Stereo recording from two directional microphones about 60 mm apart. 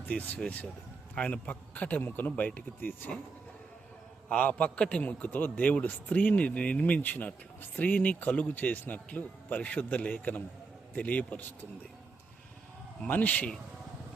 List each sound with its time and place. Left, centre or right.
0.1 s a man's voice: left
4.3 s a man's voice: left
13.0 s a man's voice: left